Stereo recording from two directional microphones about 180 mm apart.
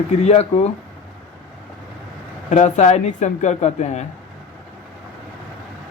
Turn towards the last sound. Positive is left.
turn(degrees=40)  # may be behind; listen again after turning